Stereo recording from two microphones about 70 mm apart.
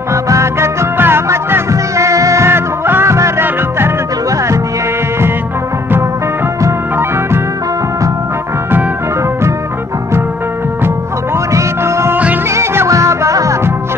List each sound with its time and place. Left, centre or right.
0.1 s music: right
11.5 s music: right